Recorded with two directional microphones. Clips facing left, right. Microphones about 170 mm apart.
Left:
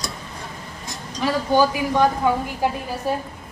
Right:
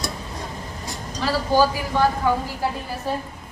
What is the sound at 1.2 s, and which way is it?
A woman's voice, 15° left (ahead or behind).